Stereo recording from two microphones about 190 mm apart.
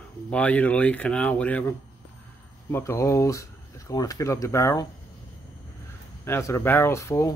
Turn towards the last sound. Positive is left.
turn(degrees=15)  # may be behind; listen again after turning